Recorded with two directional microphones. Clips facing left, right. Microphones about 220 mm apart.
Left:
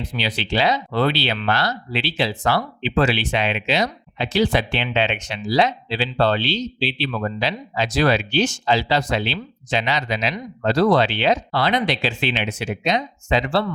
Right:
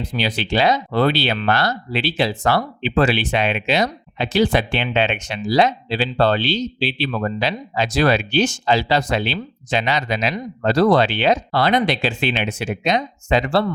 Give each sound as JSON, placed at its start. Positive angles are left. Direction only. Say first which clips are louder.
{"t": 0.1, "sound": "speech", "louder": "right 3 dB", "side_deg": -45}